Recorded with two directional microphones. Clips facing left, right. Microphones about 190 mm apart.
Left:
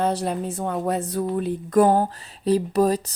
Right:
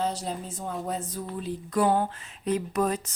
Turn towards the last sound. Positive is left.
turn(degrees=35)  # may be behind; listen again after turning